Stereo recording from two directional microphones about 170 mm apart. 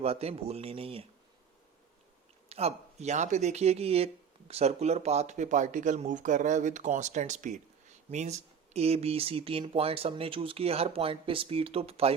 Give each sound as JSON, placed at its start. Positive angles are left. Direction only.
{"t": 0.0, "sound": "speech", "side_deg": -35}
{"t": 2.5, "sound": "speech", "side_deg": -40}